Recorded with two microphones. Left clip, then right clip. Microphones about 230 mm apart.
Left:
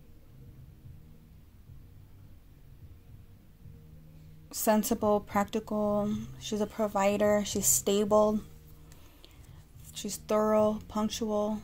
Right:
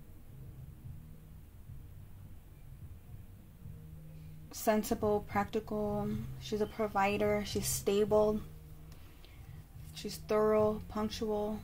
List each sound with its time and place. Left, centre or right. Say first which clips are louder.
4.5 s speech: left 4 dB; left
9.8 s speech: left 4 dB; left